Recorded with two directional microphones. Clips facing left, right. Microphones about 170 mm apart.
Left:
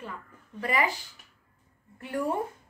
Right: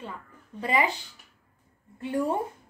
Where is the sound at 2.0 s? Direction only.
25° right (ahead or behind).